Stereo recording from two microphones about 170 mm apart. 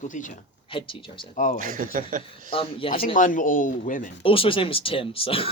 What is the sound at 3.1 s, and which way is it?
Speech, 50° left (ahead or behind).